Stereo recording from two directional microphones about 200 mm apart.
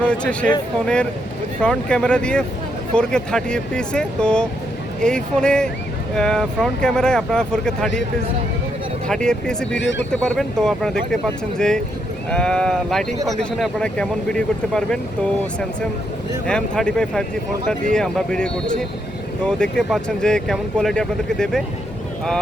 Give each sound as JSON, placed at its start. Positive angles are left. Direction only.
{"t": 0.0, "sound": "speech", "side_deg": 5}
{"t": 1.6, "sound": "speech", "side_deg": 5}
{"t": 9.0, "sound": "speech", "side_deg": 5}
{"t": 9.7, "sound": "speech", "side_deg": 60}
{"t": 10.1, "sound": "speech", "side_deg": 5}
{"t": 16.5, "sound": "speech", "side_deg": 5}